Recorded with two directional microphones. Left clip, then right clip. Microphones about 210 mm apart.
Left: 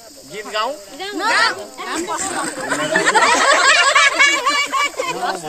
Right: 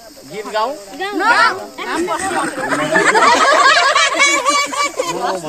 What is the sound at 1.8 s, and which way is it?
Speech, 60° left (ahead or behind).